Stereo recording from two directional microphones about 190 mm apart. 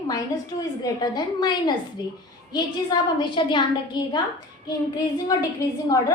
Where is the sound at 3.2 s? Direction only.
25° left (ahead or behind).